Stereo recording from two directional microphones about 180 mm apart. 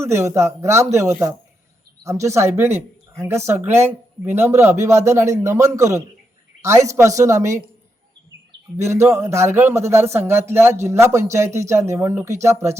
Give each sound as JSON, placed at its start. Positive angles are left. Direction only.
{"t": 0.0, "sound": "speech", "side_deg": -15}
{"t": 8.8, "sound": "speech", "side_deg": -15}